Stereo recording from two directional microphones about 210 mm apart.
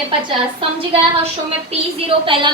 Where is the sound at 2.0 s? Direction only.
25° right (ahead or behind).